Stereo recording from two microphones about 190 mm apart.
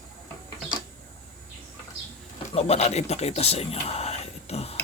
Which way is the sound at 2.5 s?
35° left (ahead or behind).